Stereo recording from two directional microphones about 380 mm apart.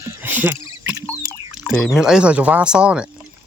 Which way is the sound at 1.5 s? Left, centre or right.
Centre.